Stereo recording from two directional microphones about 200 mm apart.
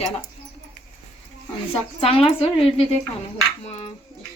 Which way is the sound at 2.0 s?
30° left (ahead or behind).